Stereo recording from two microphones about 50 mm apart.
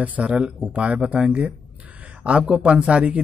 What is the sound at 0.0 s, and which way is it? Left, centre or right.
Speech, right.